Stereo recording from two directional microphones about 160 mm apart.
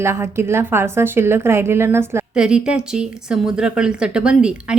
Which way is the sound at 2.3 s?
5° right (ahead or behind).